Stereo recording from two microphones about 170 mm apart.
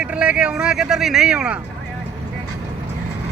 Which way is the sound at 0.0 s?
5° right (ahead or behind).